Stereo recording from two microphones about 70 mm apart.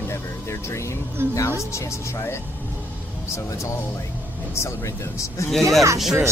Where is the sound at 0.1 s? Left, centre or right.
Left.